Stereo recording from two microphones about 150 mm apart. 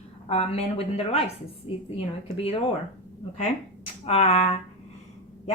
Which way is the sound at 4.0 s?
45° left (ahead or behind).